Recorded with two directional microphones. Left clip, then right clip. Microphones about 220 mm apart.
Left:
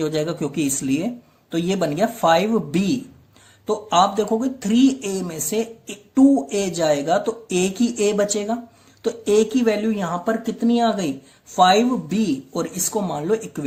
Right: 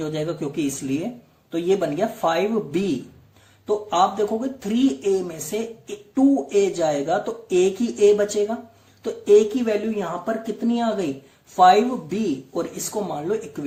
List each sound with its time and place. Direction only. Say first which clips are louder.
0.0 s speech: left 3 dB; 45° left (ahead or behind)
3.7 s speech: left 2 dB; 45° left (ahead or behind)